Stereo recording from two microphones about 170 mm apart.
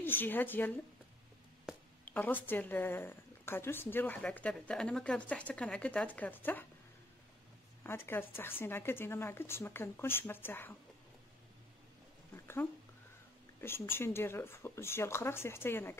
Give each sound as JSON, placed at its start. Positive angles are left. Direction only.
{"t": 0.0, "sound": "a woman's voice", "side_deg": 10}
{"t": 1.7, "sound": "a sound", "side_deg": -5}
{"t": 2.0, "sound": "a woman's voice", "side_deg": 10}
{"t": 7.8, "sound": "a woman's voice", "side_deg": 15}
{"t": 13.6, "sound": "a woman's voice", "side_deg": 15}